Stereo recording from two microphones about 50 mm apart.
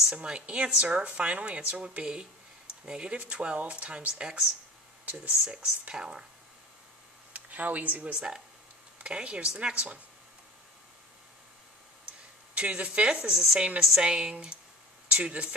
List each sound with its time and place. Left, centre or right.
0.1 s speech: right
7.3 s speech: right
8.0 s speech: centre
12.5 s speech: right
14.5 s a sound: left
15.0 s speech: right